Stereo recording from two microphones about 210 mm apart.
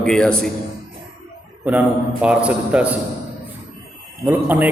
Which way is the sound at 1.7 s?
5° right (ahead or behind).